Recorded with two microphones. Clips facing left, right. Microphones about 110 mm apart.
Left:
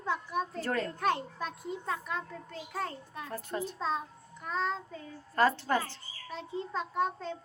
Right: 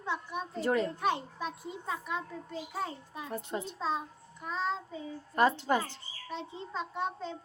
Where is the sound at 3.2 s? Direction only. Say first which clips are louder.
Even; 20° right (ahead or behind).